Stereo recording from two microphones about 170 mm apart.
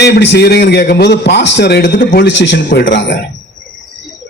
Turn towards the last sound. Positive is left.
turn(degrees=90)